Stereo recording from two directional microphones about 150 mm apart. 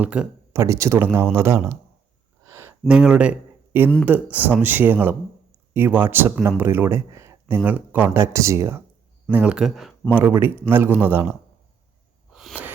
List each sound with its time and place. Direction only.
0.0 s speech: 10° right (ahead or behind)
2.5 s a sound: 15° right (ahead or behind)
2.8 s speech: 5° right (ahead or behind)
9.3 s speech: 10° right (ahead or behind)
10.2 s speech: 15° right (ahead or behind)
12.3 s a sound: centre (ahead or behind)